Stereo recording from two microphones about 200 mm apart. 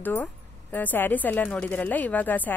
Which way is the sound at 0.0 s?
10° left (ahead or behind).